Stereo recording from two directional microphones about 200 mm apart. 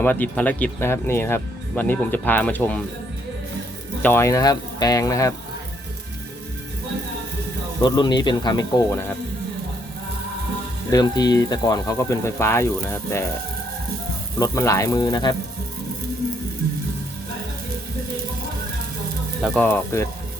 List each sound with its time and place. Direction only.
0.0 s speech: 10° left (ahead or behind)
4.0 s speech: 10° left (ahead or behind)
7.8 s speech: 20° left (ahead or behind)
10.9 s speech: 20° left (ahead or behind)
14.3 s speech: 15° left (ahead or behind)
19.5 s speech: 10° left (ahead or behind)